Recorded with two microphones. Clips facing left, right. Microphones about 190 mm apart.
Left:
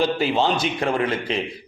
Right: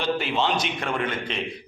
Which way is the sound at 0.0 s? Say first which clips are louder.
Left 4 dB; 35° left (ahead or behind).